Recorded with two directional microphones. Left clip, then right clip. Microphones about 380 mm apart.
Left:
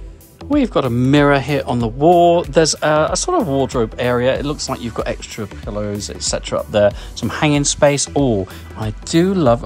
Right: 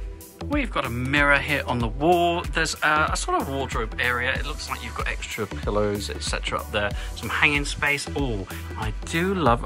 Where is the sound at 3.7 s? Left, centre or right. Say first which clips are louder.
Left 7 dB; centre.